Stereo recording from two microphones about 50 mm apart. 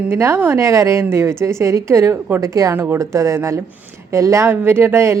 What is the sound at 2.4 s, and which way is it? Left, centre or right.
Speech, right.